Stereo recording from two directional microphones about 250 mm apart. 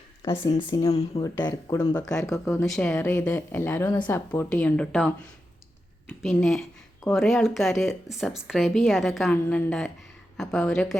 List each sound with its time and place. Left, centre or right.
0.2 s speech: centre
2.1 s speech: centre